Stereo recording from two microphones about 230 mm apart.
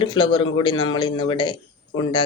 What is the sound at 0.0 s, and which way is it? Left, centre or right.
Speech, centre.